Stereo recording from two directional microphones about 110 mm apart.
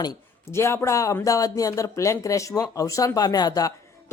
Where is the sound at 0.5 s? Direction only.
25° left (ahead or behind).